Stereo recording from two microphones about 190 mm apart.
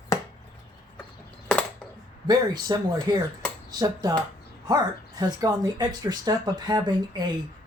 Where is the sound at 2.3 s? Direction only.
20° right (ahead or behind).